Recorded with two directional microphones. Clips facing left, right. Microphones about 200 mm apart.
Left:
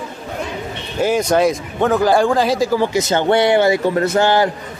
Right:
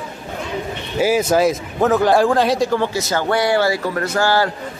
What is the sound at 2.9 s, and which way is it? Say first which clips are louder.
A man's voice: left 4 dB; 20° left (ahead or behind).